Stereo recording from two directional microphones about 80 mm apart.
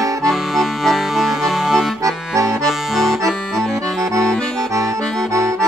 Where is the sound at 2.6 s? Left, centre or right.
Centre.